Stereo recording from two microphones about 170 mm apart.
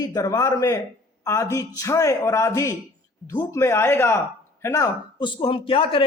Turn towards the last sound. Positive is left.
turn(degrees=30)  # may be behind; listen again after turning